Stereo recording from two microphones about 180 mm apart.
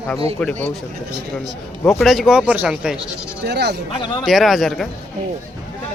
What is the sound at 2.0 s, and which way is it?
Speech, centre (ahead or behind).